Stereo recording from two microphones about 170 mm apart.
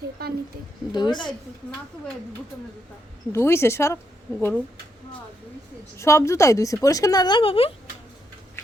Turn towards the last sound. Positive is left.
turn(degrees=30)  # may be behind; listen again after turning